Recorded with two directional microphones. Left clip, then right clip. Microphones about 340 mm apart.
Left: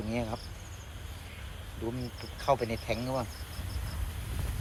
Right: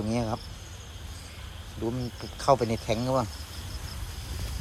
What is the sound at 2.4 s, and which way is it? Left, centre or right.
Speech, centre.